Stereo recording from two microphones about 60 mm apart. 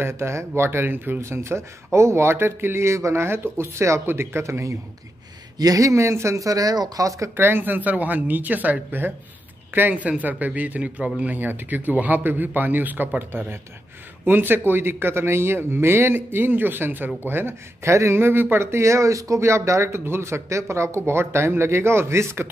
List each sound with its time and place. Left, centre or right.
0.0 s speech: right
1.2 s speech: right
4.0 s speech: right
5.6 s speech: right
7.3 s speech: right